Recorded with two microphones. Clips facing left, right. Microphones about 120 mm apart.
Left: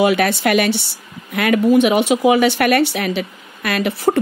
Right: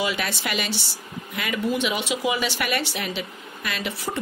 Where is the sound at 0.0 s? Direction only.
60° left (ahead or behind).